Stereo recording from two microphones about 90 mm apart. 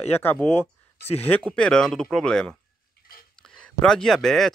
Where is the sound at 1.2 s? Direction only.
15° left (ahead or behind).